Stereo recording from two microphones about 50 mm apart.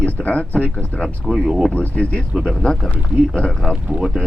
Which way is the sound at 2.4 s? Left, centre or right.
Centre.